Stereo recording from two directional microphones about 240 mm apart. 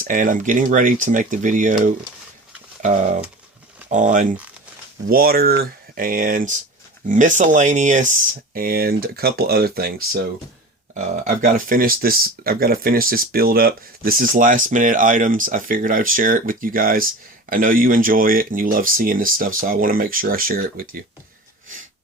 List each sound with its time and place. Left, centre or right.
0.0 s speech: right
3.8 s speech: right